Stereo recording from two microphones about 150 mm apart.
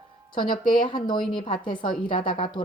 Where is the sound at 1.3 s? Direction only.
35° left (ahead or behind).